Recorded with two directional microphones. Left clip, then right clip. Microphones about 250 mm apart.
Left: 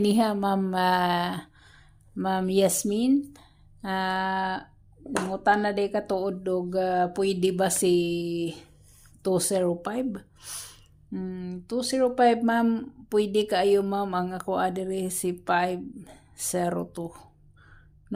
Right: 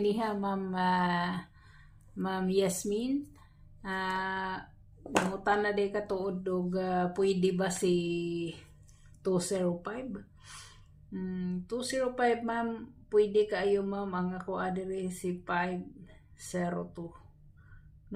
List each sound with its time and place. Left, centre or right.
0.0 s a woman's voice: left